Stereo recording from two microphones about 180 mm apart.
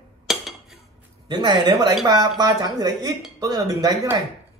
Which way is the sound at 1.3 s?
25° right (ahead or behind).